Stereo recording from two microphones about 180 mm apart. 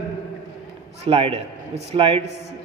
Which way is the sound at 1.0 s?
30° right (ahead or behind).